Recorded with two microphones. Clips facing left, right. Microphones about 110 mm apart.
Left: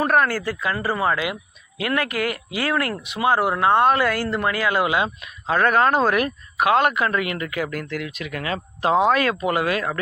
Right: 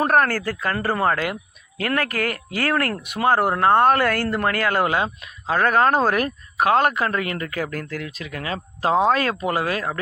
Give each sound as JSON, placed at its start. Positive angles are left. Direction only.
{"t": 0.0, "sound": "speech", "side_deg": -45}